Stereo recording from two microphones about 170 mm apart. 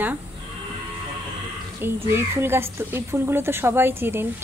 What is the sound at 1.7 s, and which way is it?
Speech, 15° right (ahead or behind).